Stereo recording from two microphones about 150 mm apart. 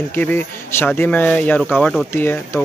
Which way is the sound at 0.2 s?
10° left (ahead or behind).